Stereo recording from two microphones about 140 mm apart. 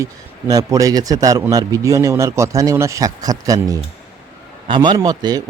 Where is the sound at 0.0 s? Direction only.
25° right (ahead or behind).